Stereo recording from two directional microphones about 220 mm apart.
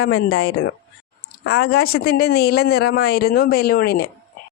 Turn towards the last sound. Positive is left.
turn(degrees=45)  # may be behind; listen again after turning